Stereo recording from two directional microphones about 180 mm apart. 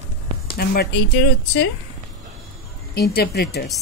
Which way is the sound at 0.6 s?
60° left (ahead or behind).